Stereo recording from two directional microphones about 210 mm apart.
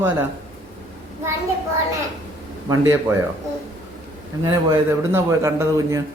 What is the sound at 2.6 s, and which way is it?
Speech, 15° right (ahead or behind).